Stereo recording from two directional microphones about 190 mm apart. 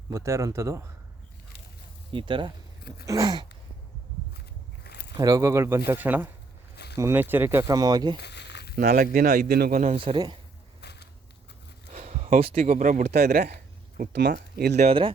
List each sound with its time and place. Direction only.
0.1 s speech: 15° right (ahead or behind)
2.1 s speech: 25° right (ahead or behind)
4.4 s a sound: 60° left (ahead or behind)
5.1 s speech: 20° right (ahead or behind)
8.2 s a sound: 65° left (ahead or behind)
8.7 s speech: 50° right (ahead or behind)
9.9 s speech: 30° right (ahead or behind)
10.8 s a sound: 60° left (ahead or behind)
11.9 s a sound: 35° right (ahead or behind)
12.5 s speech: 45° right (ahead or behind)
14.1 s speech: 65° right (ahead or behind)
14.8 s speech: 30° right (ahead or behind)